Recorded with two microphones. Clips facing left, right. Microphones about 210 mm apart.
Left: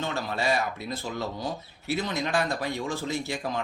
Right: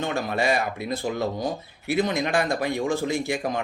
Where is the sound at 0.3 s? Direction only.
15° right (ahead or behind).